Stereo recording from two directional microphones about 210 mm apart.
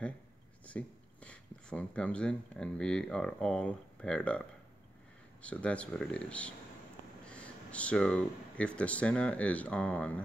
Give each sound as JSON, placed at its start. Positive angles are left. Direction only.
{"t": 0.7, "sound": "speech", "side_deg": 5}